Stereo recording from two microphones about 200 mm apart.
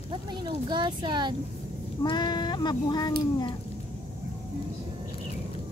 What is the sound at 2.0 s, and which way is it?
Speech, 25° left (ahead or behind).